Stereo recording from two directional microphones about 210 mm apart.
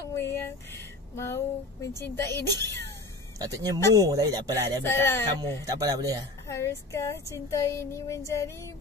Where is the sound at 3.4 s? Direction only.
15° right (ahead or behind).